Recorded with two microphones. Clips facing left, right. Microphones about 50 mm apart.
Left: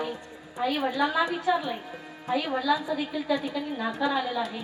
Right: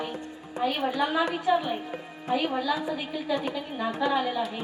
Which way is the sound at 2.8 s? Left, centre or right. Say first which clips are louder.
Left 1 dB; right.